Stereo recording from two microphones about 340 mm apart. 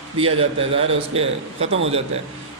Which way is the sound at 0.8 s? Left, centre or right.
Centre.